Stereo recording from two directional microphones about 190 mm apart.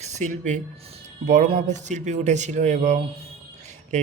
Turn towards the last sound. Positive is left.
turn(degrees=-40)  # may be behind; listen again after turning